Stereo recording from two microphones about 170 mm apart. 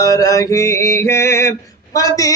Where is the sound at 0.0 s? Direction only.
20° left (ahead or behind).